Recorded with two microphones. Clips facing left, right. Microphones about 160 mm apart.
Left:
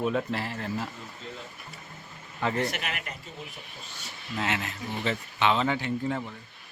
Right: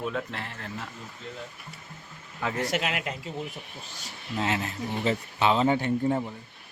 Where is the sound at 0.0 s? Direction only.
10° left (ahead or behind).